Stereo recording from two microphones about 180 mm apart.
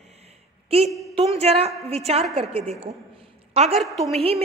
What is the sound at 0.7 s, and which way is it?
A woman's voice, 35° right (ahead or behind).